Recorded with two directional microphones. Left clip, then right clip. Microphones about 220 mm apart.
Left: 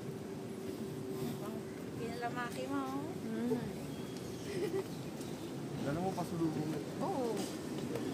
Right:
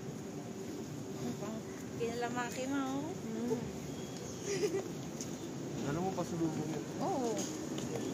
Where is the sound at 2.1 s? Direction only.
20° right (ahead or behind).